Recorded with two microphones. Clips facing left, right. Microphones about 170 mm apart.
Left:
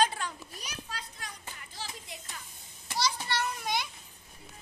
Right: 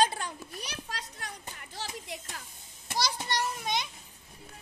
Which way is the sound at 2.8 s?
40° right (ahead or behind).